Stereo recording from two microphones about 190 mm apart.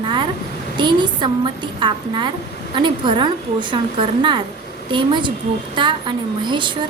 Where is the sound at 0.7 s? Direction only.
25° right (ahead or behind).